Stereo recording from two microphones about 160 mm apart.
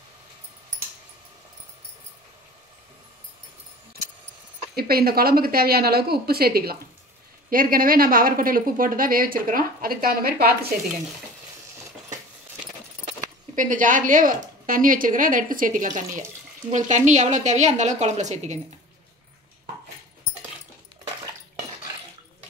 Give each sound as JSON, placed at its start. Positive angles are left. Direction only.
{"t": 4.7, "sound": "a woman's voice", "side_deg": -70}
{"t": 13.6, "sound": "a woman's voice", "side_deg": -55}